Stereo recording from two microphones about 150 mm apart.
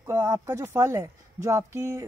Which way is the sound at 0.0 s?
20° right (ahead or behind).